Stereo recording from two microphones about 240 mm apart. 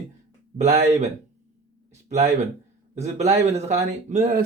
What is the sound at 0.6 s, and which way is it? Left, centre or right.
Speech, right.